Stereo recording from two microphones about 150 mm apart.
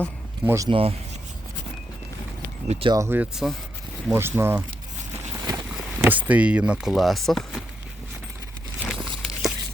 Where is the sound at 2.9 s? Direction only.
20° right (ahead or behind).